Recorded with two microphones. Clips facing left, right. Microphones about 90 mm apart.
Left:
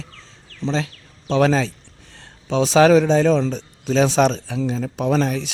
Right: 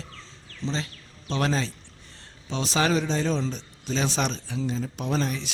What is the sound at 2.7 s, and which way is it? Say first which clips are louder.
Speech: left 11 dB; 90° left.